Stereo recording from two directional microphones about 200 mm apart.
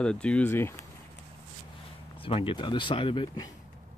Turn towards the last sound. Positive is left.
turn(degrees=25)  # may be behind; listen again after turning